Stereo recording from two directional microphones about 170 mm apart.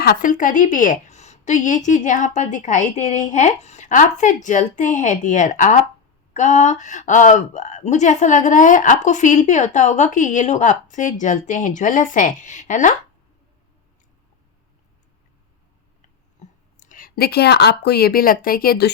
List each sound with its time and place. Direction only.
0.0 s speech: 55° left (ahead or behind)
16.4 s whispering: 45° left (ahead or behind)
16.8 s speech: 55° left (ahead or behind)